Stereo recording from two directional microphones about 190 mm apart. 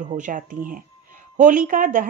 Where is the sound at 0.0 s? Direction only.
40° right (ahead or behind).